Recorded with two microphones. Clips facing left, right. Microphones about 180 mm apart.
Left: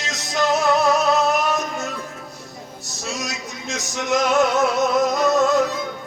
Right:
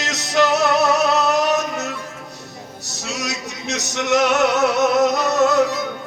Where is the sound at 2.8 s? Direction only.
70° right (ahead or behind).